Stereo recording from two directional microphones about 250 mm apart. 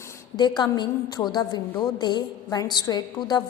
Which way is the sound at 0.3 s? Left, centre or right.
Centre.